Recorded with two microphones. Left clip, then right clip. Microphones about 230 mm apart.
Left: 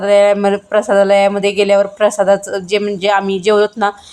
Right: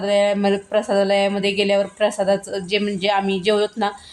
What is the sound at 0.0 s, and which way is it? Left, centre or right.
Speech, centre.